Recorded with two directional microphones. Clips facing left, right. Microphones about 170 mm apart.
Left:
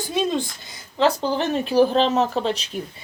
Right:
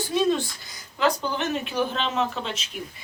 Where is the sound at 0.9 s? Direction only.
30° left (ahead or behind).